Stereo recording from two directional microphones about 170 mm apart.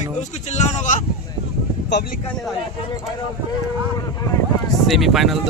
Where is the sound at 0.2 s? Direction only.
40° left (ahead or behind).